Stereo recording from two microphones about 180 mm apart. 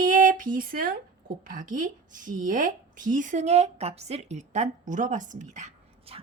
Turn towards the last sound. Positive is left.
turn(degrees=-40)  # may be behind; listen again after turning